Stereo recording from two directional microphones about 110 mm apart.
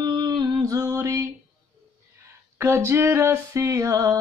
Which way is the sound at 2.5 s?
25° right (ahead or behind).